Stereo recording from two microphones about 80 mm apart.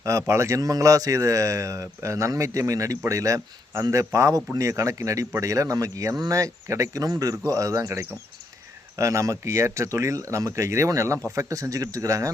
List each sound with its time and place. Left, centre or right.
0.0 s speech: right